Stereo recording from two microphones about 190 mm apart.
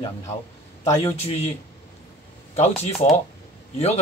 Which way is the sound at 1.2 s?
35° left (ahead or behind).